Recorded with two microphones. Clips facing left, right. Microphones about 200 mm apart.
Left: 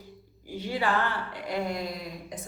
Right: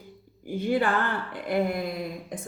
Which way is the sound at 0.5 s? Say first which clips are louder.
Right 4 dB; 50° right (ahead or behind).